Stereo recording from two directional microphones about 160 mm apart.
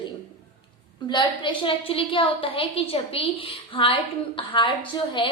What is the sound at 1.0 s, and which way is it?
A woman's voice, 30° left (ahead or behind).